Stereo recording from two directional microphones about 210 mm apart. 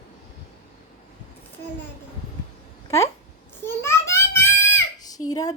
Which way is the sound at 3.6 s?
10° left (ahead or behind).